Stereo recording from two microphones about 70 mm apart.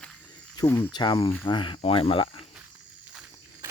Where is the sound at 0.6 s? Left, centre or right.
Left.